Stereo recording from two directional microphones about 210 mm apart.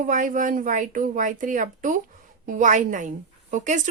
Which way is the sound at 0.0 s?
40° right (ahead or behind).